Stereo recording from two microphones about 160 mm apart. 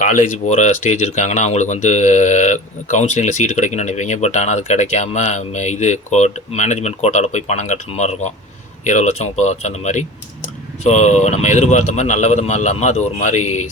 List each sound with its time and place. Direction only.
0.0 s speech: 55° left (ahead or behind)